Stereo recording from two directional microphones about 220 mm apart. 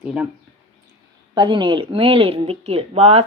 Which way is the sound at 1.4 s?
20° right (ahead or behind).